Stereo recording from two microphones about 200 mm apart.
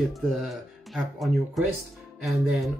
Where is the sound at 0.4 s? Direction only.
Centre (ahead or behind).